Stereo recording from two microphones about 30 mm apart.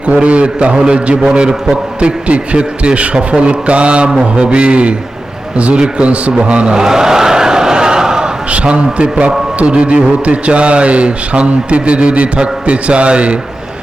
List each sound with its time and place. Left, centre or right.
0.0 s a man's voice: right
6.7 s a sound: centre
8.4 s a man's voice: right